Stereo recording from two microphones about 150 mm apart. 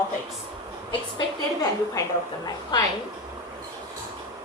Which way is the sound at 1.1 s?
25° left (ahead or behind).